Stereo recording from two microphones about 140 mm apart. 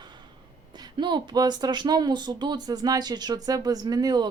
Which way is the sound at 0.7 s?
30° right (ahead or behind).